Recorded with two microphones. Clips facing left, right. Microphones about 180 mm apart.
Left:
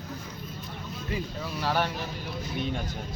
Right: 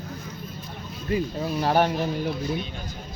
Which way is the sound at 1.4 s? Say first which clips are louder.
Right 6 dB; 40° right (ahead or behind).